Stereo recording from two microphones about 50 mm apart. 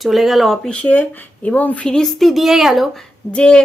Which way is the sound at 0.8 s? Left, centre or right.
Left.